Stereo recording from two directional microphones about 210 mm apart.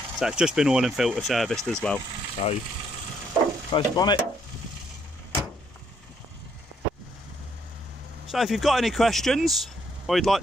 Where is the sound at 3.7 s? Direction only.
20° left (ahead or behind).